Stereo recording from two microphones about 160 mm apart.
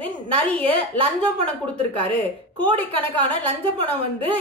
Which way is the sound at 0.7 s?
35° right (ahead or behind).